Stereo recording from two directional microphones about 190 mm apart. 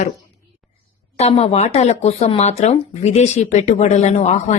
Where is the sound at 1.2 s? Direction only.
35° left (ahead or behind).